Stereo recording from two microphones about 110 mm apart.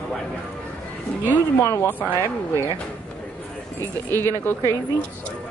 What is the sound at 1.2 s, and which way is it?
Speech, 25° left (ahead or behind).